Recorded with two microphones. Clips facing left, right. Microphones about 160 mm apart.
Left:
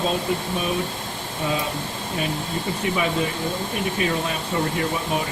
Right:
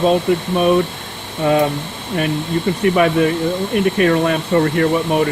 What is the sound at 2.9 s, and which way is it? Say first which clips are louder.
Speech: right 10 dB; 60° right (ahead or behind).